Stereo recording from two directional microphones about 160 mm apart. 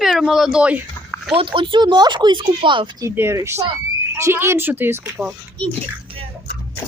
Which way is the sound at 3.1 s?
15° right (ahead or behind).